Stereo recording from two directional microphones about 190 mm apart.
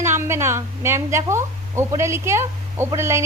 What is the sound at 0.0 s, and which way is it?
A woman's voice, 15° right (ahead or behind).